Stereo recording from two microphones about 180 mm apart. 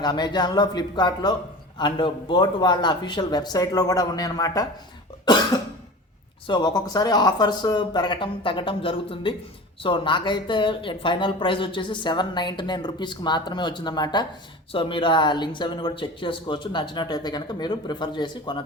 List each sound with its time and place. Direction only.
0.0 s speech: 25° left (ahead or behind)
6.5 s speech: 25° left (ahead or behind)